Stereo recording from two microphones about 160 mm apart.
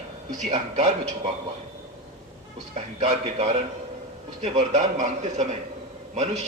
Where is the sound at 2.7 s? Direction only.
45° right (ahead or behind).